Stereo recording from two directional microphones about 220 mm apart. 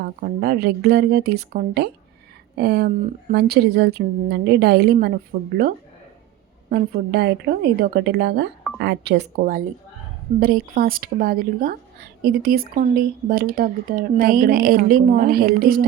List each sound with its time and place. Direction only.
0.0 s a woman's voice: 45° right (ahead or behind)